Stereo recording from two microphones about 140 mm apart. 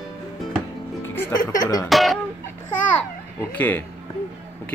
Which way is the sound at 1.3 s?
25° left (ahead or behind).